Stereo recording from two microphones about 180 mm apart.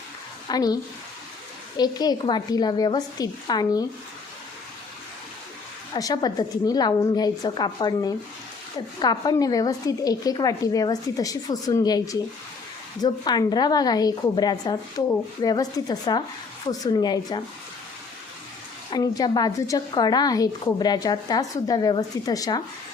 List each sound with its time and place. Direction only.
0.4 s a woman's voice: 20° left (ahead or behind)
5.9 s a woman's voice: 20° left (ahead or behind)
18.9 s a woman's voice: 20° left (ahead or behind)